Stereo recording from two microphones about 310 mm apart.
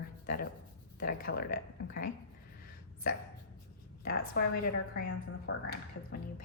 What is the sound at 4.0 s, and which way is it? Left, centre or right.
Speech, left.